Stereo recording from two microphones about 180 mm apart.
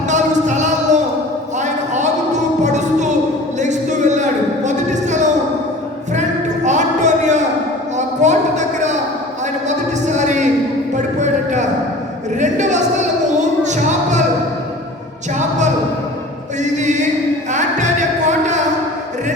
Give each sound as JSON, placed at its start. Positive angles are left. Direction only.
{"t": 0.1, "sound": "music", "side_deg": -40}
{"t": 1.5, "sound": "a sound", "side_deg": -40}
{"t": 6.7, "sound": "a sound", "side_deg": -40}
{"t": 12.4, "sound": "music", "side_deg": -40}
{"t": 15.4, "sound": "music", "side_deg": -40}
{"t": 17.5, "sound": "music", "side_deg": -40}